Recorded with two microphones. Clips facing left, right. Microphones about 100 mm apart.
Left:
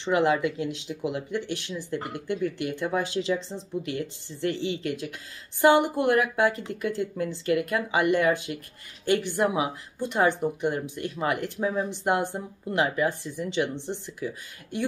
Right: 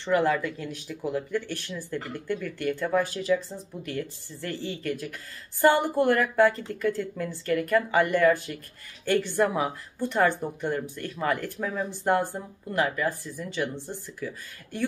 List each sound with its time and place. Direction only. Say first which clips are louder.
0.0 s a woman's voice: left 1 dB; 15° left (ahead or behind)